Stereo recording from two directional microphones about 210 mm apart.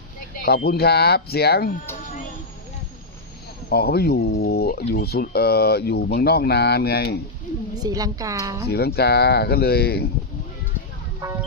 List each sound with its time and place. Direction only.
0.4 s speech: 50° left (ahead or behind)
3.7 s speech: 50° left (ahead or behind)
7.9 s a woman's voice: 15° right (ahead or behind)
8.7 s speech: 50° left (ahead or behind)
11.2 s speech: 10° right (ahead or behind)